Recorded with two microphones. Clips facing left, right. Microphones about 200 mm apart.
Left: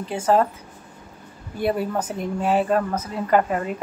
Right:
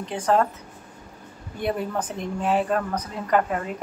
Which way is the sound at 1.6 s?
5° left (ahead or behind).